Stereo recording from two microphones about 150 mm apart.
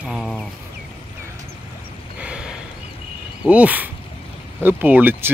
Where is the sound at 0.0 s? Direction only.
Centre (ahead or behind).